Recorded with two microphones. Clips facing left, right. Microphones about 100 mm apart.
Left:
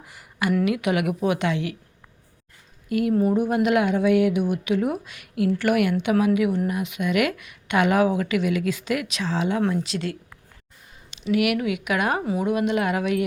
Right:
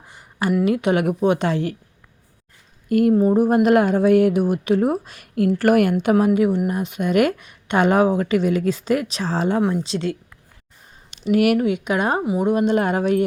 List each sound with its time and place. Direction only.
0.0 s a sound: 30° right (ahead or behind)
0.6 s a woman's voice: 35° right (ahead or behind)
2.9 s speech: 45° right (ahead or behind)
3.2 s a woman's voice: 35° right (ahead or behind)
9.6 s speech: 15° right (ahead or behind)
9.8 s speech: 30° right (ahead or behind)
11.2 s a woman's voice: 40° right (ahead or behind)
12.2 s speech: 15° right (ahead or behind)
12.5 s a woman's voice: 35° right (ahead or behind)